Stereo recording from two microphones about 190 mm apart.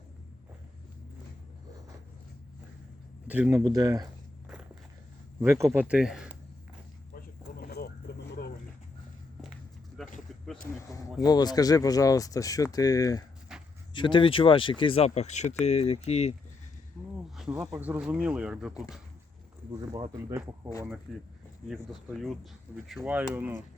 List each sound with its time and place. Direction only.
3.2 s speech: 10° right (ahead or behind)
3.6 s speech: 20° right (ahead or behind)
4.4 s walk: 5° right (ahead or behind)
5.4 s speech: 15° right (ahead or behind)
7.1 s a sound: 50° left (ahead or behind)
10.2 s a sound: centre (ahead or behind)
10.8 s speech: 15° left (ahead or behind)
13.5 s a sound: 5° right (ahead or behind)
13.9 s speech: 25° left (ahead or behind)
17.6 s speech: 5° right (ahead or behind)
19.9 s speech: 20° right (ahead or behind)
21.1 s speech: centre (ahead or behind)